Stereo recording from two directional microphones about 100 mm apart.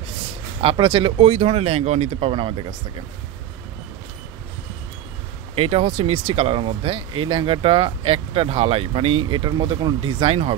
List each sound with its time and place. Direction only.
0.6 s speech: 60° right (ahead or behind)
1.2 s speech: 90° right; by 2.7 s 60° right (ahead or behind)
5.6 s speech: 85° right; by 9.3 s 70° right (ahead or behind)
9.3 s speech: 50° right (ahead or behind); by 10.5 s 70° right (ahead or behind)